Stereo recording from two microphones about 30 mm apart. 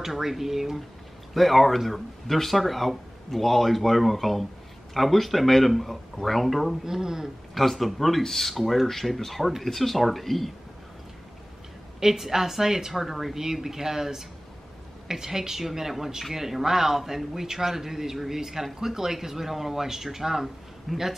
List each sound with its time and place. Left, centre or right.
0.0 s a man's voice: centre
1.3 s speech: centre
6.8 s a man's voice: centre
7.5 s speech: centre
12.0 s a man's voice: centre
20.9 s speech: centre